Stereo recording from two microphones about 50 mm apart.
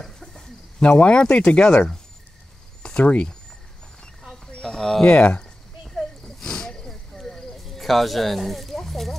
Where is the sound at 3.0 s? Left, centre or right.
Left.